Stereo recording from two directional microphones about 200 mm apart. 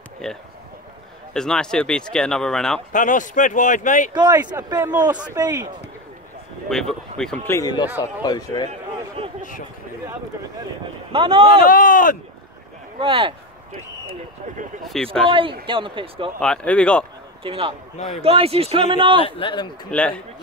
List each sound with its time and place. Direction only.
0.2 s speech: 5° left (ahead or behind)
2.9 s speech: 40° left (ahead or behind)
4.1 s a man's voice: 20° right (ahead or behind)
6.7 s speech: centre (ahead or behind)
7.5 s speech: 20° left (ahead or behind)
9.2 s a sound: 30° right (ahead or behind)
11.1 s speech: 25° right (ahead or behind)
11.6 s speech: 40° left (ahead or behind)
13.0 s speech: 25° right (ahead or behind)
15.2 s speech: 25° right (ahead or behind)
16.3 s speech: 5° left (ahead or behind)
17.4 s a man's voice: 25° right (ahead or behind)
19.2 s speech: 25° left (ahead or behind)
19.9 s speech: 5° left (ahead or behind)